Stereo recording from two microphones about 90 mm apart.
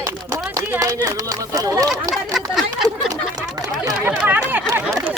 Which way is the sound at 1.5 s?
40° right (ahead or behind).